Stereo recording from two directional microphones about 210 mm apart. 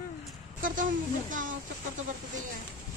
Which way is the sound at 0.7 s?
40° right (ahead or behind).